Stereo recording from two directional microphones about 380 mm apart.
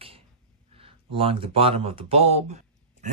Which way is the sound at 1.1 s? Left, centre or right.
Centre.